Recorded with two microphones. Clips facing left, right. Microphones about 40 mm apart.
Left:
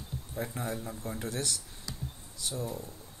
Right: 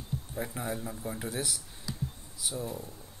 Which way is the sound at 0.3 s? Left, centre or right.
Centre.